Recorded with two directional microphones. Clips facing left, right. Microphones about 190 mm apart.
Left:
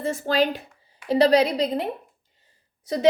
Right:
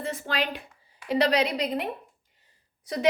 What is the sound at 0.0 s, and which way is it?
A woman's voice, 45° left (ahead or behind).